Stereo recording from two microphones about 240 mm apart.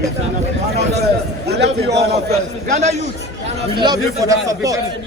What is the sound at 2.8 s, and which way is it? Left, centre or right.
Speech, right.